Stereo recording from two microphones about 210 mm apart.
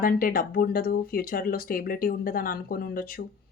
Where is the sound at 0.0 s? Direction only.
45° left (ahead or behind).